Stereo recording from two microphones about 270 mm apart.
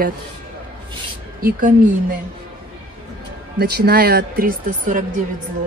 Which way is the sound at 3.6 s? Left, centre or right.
Right.